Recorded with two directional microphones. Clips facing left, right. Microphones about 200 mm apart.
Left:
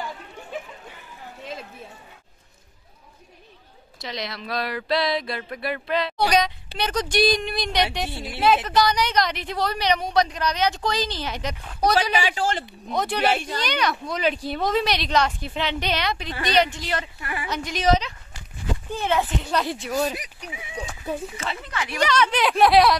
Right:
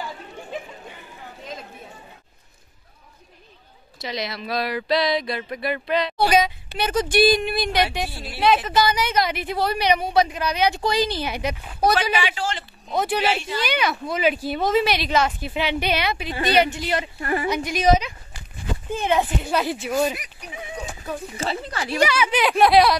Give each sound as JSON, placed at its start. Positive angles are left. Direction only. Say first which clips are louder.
{"t": 4.0, "sound": "speech", "louder": "right 3 dB", "side_deg": -5}
{"t": 8.1, "sound": "a woman's voice", "louder": "left 3 dB", "side_deg": 20}
{"t": 8.6, "sound": "a woman's voice", "louder": "even", "side_deg": -5}
{"t": 12.2, "sound": "speech", "louder": "left 2 dB", "side_deg": 45}
{"t": 12.9, "sound": "speech", "louder": "right 2 dB", "side_deg": -5}
{"t": 13.2, "sound": "speech", "louder": "left 1 dB", "side_deg": 55}
{"t": 13.6, "sound": "a woman's voice", "louder": "right 1 dB", "side_deg": -5}
{"t": 17.2, "sound": "speech", "louder": "right 8 dB", "side_deg": -40}
{"t": 17.6, "sound": "a woman's voice", "louder": "right 1 dB", "side_deg": -10}
{"t": 21.4, "sound": "speech", "louder": "right 3 dB", "side_deg": -35}
{"t": 22.0, "sound": "speech", "louder": "right 1 dB", "side_deg": -5}